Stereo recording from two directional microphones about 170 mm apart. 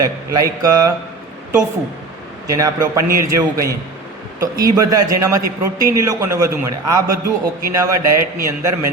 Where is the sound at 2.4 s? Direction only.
20° right (ahead or behind).